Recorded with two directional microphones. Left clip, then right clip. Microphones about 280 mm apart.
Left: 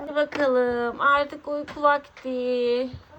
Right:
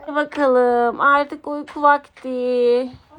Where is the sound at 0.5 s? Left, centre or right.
Centre.